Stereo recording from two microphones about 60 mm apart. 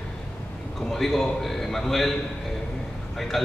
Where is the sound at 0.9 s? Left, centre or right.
Centre.